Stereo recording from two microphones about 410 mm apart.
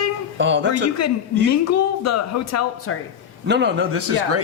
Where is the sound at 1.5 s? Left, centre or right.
Left.